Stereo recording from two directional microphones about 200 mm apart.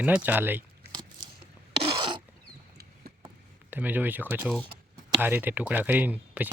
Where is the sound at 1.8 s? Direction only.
25° right (ahead or behind).